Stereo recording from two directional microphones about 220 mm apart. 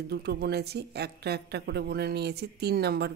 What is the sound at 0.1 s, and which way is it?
Speech, 50° right (ahead or behind).